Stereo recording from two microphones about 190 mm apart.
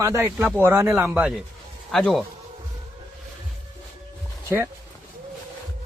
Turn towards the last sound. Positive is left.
turn(degrees=-15)  # may be behind; listen again after turning